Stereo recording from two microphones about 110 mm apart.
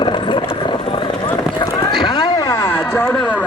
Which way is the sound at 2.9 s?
20° left (ahead or behind).